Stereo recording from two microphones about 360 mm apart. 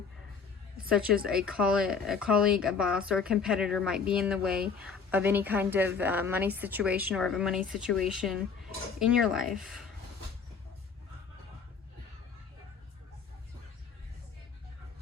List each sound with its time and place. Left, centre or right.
1.3 s a woman's voice: centre
4.4 s speech: right
4.8 s a woman's voice: centre